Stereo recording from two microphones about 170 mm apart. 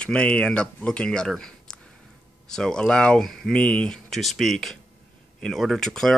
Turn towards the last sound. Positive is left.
turn(degrees=0)  # may be behind; listen again after turning